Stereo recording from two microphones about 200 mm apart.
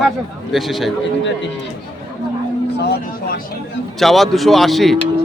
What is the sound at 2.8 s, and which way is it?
Speech, 55° left (ahead or behind).